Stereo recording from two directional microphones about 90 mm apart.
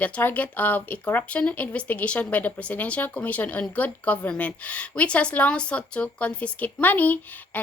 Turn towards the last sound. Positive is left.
turn(degrees=20)  # may be behind; listen again after turning